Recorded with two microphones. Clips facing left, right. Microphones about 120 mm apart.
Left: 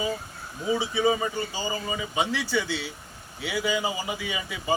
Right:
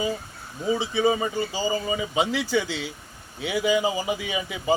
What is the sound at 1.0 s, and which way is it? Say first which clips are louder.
Speech: right 2 dB; 15° right (ahead or behind).